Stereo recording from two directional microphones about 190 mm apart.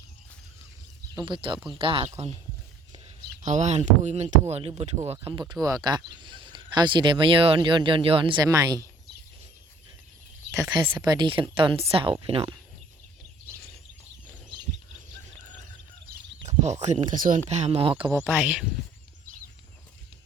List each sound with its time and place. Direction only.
1.1 s speech: 25° right (ahead or behind)
3.4 s speech: 35° right (ahead or behind); by 8.9 s 20° right (ahead or behind)
10.5 s speech: 20° right (ahead or behind)
16.5 s speech: 35° right (ahead or behind)
18.2 s speech: 10° right (ahead or behind)